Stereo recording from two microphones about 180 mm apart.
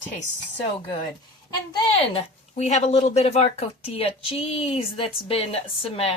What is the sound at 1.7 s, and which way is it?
Speech, 30° left (ahead or behind).